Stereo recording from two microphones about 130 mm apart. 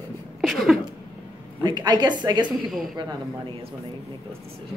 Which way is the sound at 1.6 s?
35° right (ahead or behind).